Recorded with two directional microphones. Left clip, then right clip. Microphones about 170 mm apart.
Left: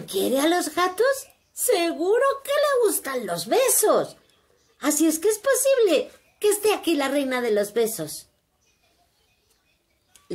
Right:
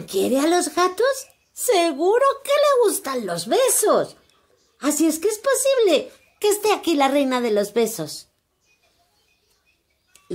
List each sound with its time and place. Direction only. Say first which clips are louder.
0.0 s a woman's voice: right 2 dB; 35° right (ahead or behind)